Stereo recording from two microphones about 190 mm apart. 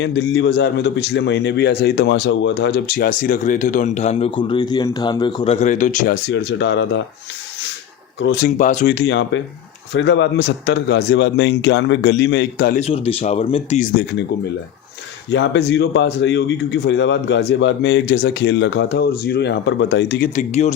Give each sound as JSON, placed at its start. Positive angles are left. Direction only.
{"t": 0.0, "sound": "a man's voice", "side_deg": 70}
{"t": 5.5, "sound": "speech", "side_deg": 40}
{"t": 6.1, "sound": "speech", "side_deg": 65}
{"t": 8.2, "sound": "speech", "side_deg": 60}
{"t": 8.5, "sound": "a man's voice", "side_deg": 40}
{"t": 9.0, "sound": "speech", "side_deg": 70}
{"t": 12.8, "sound": "speech", "side_deg": 30}
{"t": 15.3, "sound": "speech", "side_deg": 70}
{"t": 20.3, "sound": "speech", "side_deg": 40}